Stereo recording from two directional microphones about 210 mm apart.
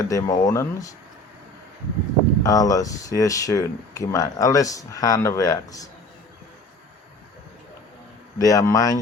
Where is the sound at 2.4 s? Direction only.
15° left (ahead or behind).